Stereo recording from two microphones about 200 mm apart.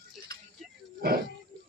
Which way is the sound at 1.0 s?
50° right (ahead or behind).